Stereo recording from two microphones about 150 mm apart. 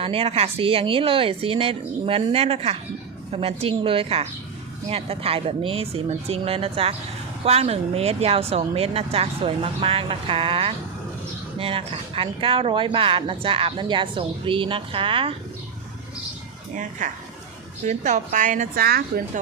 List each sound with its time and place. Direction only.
0.0 s speech: 40° right (ahead or behind)
16.7 s speech: 60° right (ahead or behind); by 19.2 s 85° right